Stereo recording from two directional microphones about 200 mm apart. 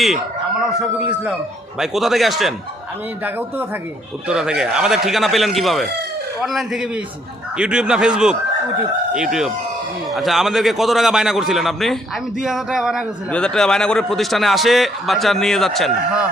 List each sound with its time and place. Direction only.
0.0 s a man's voice: centre (ahead or behind)